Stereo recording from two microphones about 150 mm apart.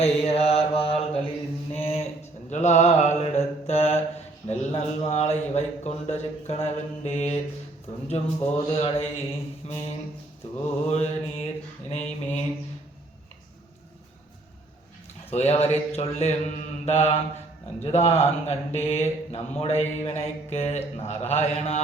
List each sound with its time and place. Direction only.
0.0 s mantra: 40° left (ahead or behind)
1.7 s a sound: 40° left (ahead or behind)
2.5 s mantra: 50° left (ahead or behind)
4.4 s speech: 45° left (ahead or behind)
10.8 s speech: 45° left (ahead or behind)
15.3 s speech: 45° left (ahead or behind)